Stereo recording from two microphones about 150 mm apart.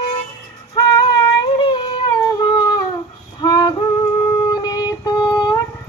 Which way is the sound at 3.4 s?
30° left (ahead or behind).